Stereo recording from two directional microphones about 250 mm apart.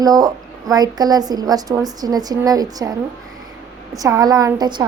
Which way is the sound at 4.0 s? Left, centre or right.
Centre.